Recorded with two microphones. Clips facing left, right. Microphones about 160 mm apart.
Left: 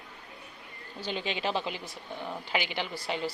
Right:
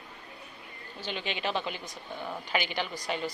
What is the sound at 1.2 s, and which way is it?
A woman's voice, 25° left (ahead or behind).